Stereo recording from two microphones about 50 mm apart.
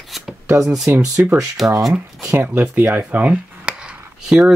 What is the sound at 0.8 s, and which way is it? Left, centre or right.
Speech, right.